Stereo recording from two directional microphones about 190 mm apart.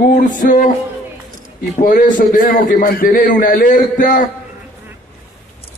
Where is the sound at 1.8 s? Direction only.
45° left (ahead or behind).